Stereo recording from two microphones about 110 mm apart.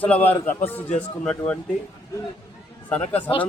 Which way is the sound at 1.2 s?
10° left (ahead or behind).